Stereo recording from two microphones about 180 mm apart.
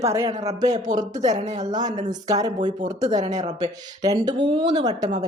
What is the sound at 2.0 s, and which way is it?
A woman's voice, 20° right (ahead or behind).